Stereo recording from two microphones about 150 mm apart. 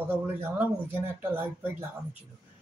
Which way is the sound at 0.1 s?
15° right (ahead or behind).